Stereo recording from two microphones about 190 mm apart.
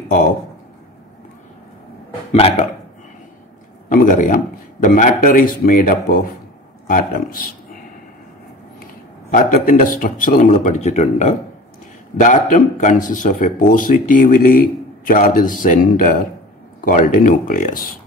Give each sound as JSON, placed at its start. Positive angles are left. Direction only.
{"t": 3.9, "sound": "speech", "side_deg": 45}
{"t": 9.3, "sound": "speech", "side_deg": 45}